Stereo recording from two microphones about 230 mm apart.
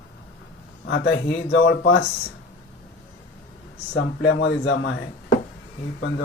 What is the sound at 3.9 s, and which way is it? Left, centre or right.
Speech, left.